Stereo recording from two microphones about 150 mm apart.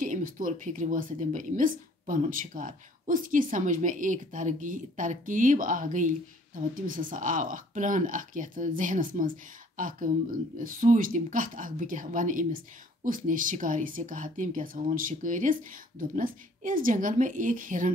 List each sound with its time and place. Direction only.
0.0 s a woman's voice: 65° right (ahead or behind)